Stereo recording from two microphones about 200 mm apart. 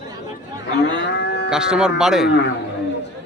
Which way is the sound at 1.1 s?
60° left (ahead or behind).